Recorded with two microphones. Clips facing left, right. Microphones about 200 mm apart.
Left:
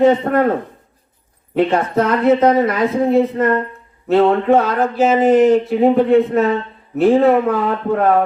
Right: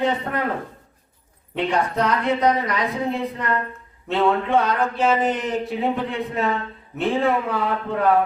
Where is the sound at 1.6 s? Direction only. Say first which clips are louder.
Left 7 dB; 45° left (ahead or behind).